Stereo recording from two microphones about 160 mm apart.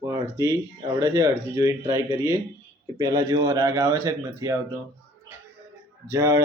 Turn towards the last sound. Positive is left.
turn(degrees=-15)  # may be behind; listen again after turning